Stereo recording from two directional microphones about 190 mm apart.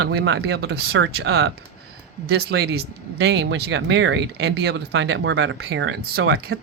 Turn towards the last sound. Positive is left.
turn(degrees=-60)  # may be behind; listen again after turning